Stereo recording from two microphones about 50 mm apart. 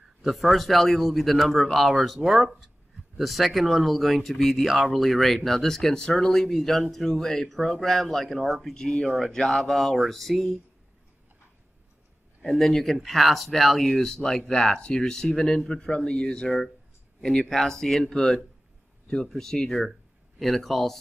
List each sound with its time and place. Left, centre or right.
0.2 s speech: centre
8.7 s speech: centre
12.4 s speech: centre
16.4 s speech: centre